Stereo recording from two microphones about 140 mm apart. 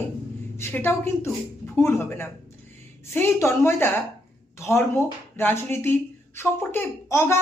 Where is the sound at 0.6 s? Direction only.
15° left (ahead or behind).